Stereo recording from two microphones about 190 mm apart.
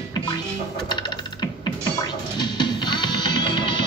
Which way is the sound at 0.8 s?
20° left (ahead or behind).